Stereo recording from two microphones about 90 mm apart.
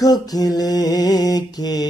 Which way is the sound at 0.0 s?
45° left (ahead or behind).